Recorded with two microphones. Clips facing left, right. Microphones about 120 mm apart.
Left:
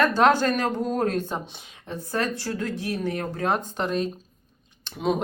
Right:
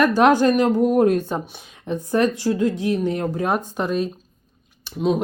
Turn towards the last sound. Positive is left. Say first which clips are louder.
# right 4 dB
turn(degrees=0)  # may be behind; listen again after turning